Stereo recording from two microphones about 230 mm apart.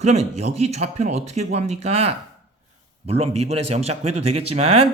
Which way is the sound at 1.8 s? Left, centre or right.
Right.